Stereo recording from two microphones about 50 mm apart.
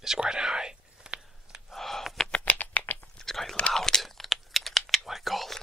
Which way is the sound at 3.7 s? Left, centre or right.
Centre.